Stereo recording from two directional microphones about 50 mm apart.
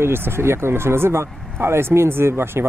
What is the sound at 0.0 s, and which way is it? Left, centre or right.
Speech, right.